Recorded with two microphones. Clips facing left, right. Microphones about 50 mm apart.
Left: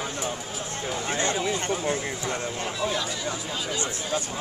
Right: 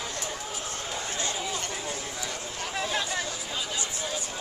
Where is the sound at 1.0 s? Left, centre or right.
Left.